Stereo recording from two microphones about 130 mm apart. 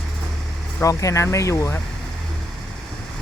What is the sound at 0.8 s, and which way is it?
Speech, 25° left (ahead or behind).